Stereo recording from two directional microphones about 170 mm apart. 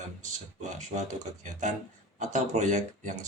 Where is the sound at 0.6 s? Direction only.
45° right (ahead or behind).